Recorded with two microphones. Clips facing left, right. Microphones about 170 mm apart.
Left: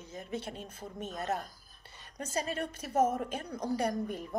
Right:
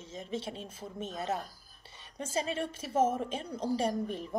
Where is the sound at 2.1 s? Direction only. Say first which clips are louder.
Right 1 dB; 25° right (ahead or behind).